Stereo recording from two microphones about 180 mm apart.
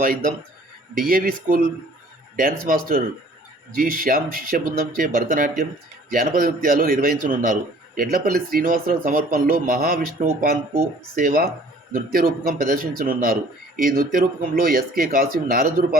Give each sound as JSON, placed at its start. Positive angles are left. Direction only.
{"t": 0.9, "sound": "a man's voice", "side_deg": -50}